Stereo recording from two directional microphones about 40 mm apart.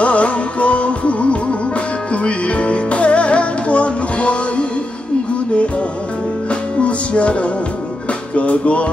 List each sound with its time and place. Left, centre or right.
0.0 s music: left
6.5 s music: left